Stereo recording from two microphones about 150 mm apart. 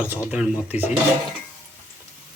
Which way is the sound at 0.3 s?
5° right (ahead or behind).